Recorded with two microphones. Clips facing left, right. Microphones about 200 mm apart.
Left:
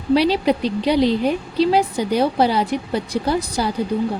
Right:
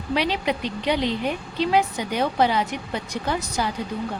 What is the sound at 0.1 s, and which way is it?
A woman's voice, 35° left (ahead or behind).